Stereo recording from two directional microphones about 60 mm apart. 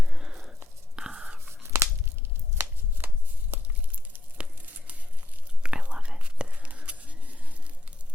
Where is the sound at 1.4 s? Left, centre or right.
Right.